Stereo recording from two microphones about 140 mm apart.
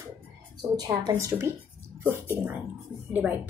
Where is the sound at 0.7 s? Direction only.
25° right (ahead or behind).